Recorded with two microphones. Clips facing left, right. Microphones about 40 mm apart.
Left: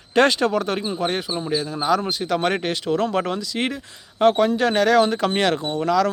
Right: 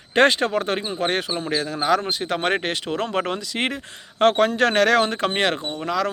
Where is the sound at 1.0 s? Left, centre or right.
Right.